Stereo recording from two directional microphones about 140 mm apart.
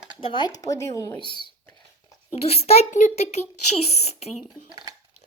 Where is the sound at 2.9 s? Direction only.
60° left (ahead or behind).